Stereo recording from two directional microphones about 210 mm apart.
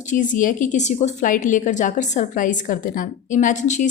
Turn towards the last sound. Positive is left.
turn(degrees=35)  # may be behind; listen again after turning